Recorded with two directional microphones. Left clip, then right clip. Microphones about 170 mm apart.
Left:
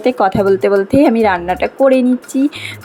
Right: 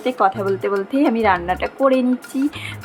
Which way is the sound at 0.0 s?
30° left (ahead or behind).